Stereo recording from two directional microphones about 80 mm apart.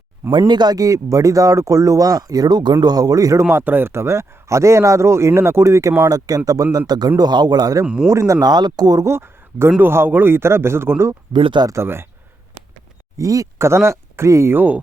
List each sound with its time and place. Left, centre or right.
0.3 s speech: right
3.5 s speech: right
6.1 s speech: right
8.1 s speech: right
8.4 s speech: right
9.0 s speech: right
11.3 s speech: right
11.7 s speech: right
13.1 s speech: right
14.5 s speech: right